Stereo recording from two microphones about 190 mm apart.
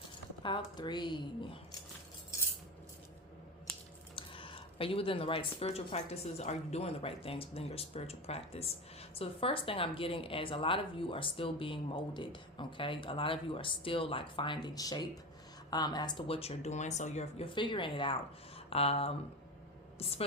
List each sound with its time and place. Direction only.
0.4 s speech: 25° left (ahead or behind)
4.1 s a woman's voice: 25° left (ahead or behind)